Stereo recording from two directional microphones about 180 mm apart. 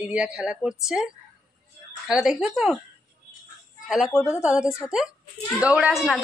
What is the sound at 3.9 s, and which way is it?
Speech, centre (ahead or behind).